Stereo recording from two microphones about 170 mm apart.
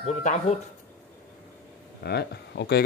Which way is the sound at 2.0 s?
75° left (ahead or behind).